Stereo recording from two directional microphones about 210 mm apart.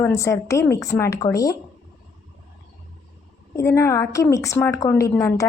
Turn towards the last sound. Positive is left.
turn(degrees=10)  # may be behind; listen again after turning